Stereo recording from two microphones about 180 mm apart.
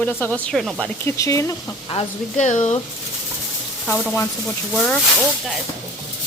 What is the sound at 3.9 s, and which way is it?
Speech, 15° left (ahead or behind).